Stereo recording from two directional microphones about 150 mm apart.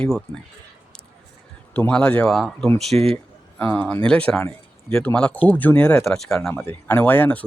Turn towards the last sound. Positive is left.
turn(degrees=10)  # may be behind; listen again after turning